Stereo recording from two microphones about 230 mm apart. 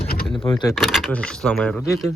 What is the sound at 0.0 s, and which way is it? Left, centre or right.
Vehicle, left.